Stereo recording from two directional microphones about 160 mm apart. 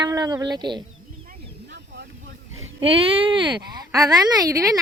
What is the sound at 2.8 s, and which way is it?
Speech, 35° right (ahead or behind).